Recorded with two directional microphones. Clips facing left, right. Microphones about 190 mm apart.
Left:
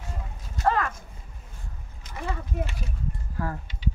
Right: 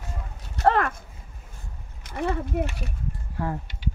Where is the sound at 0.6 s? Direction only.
60° right (ahead or behind).